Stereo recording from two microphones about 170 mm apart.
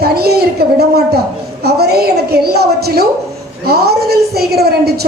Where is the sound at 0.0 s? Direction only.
65° right (ahead or behind).